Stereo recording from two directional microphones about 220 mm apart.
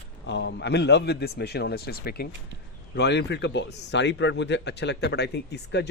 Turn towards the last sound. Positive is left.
turn(degrees=50)  # may be behind; listen again after turning